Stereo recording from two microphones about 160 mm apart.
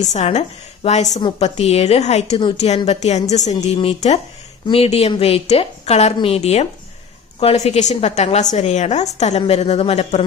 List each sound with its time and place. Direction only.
0.1 s a woman's voice: 45° left (ahead or behind)